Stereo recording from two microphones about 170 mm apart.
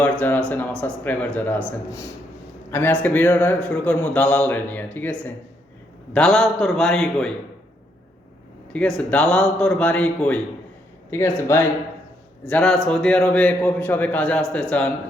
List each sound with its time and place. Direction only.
0.0 s a man's voice: 10° left (ahead or behind)
8.7 s a man's voice: 5° left (ahead or behind)